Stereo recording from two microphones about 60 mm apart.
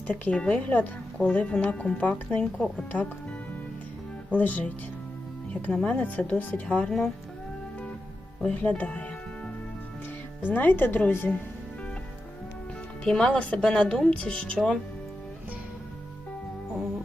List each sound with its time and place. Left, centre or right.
0.1 s speech: left
4.4 s speech: left
8.4 s speech: left
10.4 s speech: left
11.3 s speech: centre
13.1 s speech: centre